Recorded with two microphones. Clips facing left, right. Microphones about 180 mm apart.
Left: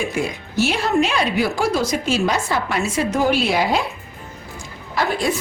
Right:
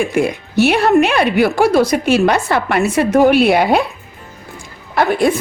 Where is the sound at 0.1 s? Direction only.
60° right (ahead or behind).